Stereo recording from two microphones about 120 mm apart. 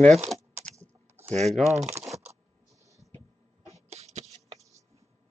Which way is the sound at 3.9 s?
65° right (ahead or behind).